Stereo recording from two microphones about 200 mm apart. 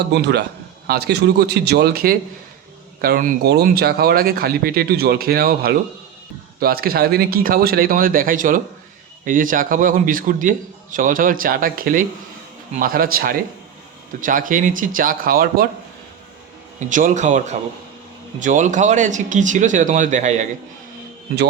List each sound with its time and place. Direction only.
0.1 s a man's voice: 55° right (ahead or behind)
16.9 s speech: 40° right (ahead or behind)